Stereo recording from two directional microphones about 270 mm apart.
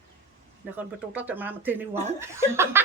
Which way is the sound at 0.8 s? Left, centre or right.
Centre.